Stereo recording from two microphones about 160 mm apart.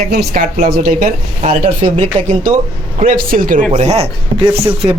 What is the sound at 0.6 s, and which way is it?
Speech, 65° right (ahead or behind).